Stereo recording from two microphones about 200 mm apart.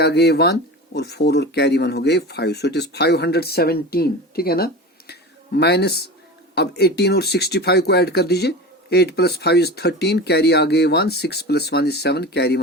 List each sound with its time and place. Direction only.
0.0 s speech: 55° left (ahead or behind)